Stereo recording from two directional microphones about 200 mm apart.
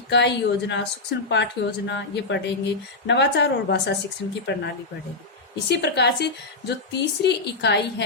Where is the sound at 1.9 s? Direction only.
60° left (ahead or behind).